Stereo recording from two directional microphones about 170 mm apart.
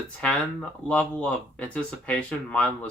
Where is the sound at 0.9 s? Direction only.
5° left (ahead or behind).